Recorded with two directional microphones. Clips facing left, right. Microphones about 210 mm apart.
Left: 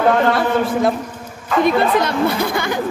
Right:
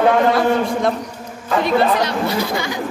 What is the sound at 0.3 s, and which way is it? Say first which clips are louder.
Speech: right 1 dB; 5° left (ahead or behind).